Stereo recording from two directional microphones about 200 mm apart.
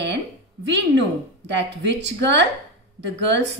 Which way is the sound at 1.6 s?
60° right (ahead or behind).